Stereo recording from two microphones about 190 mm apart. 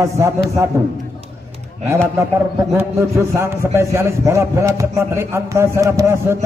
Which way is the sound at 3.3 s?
15° right (ahead or behind).